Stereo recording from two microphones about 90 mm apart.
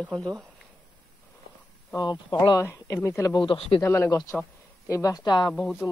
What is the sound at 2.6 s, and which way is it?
Speech, 30° left (ahead or behind).